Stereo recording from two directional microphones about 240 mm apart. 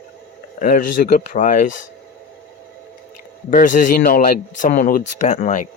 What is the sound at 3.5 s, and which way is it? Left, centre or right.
Speech, left.